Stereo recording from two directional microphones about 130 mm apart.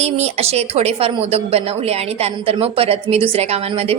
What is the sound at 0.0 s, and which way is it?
Speech, 55° right (ahead or behind).